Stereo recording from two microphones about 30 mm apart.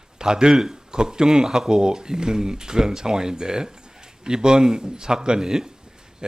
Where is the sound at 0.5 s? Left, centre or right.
Centre.